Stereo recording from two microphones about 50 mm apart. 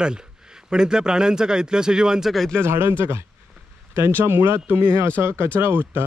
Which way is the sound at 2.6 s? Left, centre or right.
Right.